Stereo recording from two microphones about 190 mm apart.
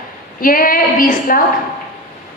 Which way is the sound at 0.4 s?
45° left (ahead or behind).